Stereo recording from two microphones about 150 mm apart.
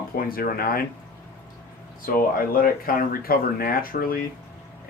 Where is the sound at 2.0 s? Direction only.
70° left (ahead or behind).